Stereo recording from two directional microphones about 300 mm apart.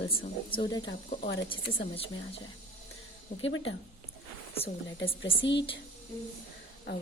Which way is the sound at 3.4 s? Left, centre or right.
Left.